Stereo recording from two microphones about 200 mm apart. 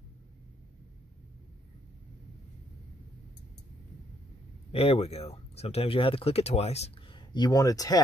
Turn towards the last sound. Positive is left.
turn(degrees=20)  # may be behind; listen again after turning